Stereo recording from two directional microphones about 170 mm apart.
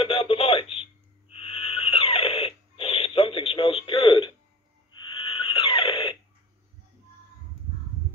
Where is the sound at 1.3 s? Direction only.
35° left (ahead or behind).